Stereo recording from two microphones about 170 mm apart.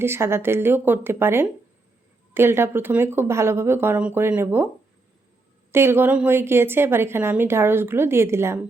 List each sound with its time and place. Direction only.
0.0 s a woman's voice: 15° right (ahead or behind)
5.7 s a woman's voice: 15° right (ahead or behind)